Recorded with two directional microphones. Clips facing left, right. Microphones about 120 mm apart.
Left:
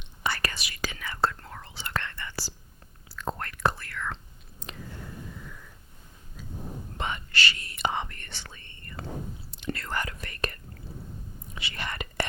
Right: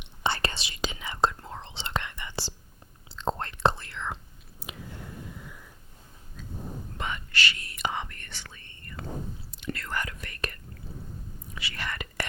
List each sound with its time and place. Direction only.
0.0 s whispering: 25° right (ahead or behind)
4.6 s a sound: 10° right (ahead or behind)
7.0 s whispering: 30° left (ahead or behind)